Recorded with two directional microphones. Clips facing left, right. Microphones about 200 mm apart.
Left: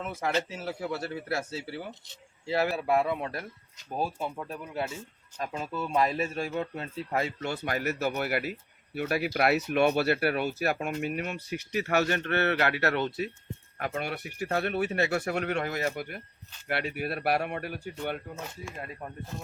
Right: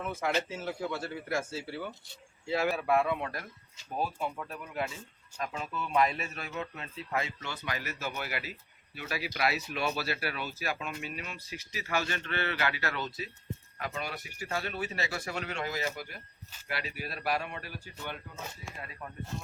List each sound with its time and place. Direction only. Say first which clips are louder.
0.6 s speech: left 2 dB; 40° left (ahead or behind)
2.5 s speech: left 2 dB; 35° left (ahead or behind); by 18.2 s 55° left (ahead or behind)
18.8 s speech: left 4 dB; 40° left (ahead or behind)